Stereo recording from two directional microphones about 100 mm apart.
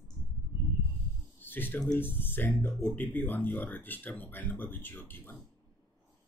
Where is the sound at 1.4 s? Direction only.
20° left (ahead or behind).